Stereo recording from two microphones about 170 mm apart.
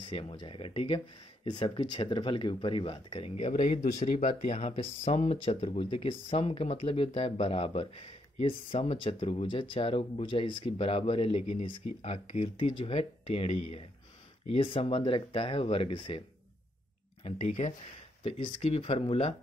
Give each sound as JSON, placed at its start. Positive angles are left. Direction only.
{"t": 0.0, "sound": "speech", "side_deg": 30}
{"t": 17.2, "sound": "speech", "side_deg": 45}
{"t": 18.2, "sound": "speech", "side_deg": 35}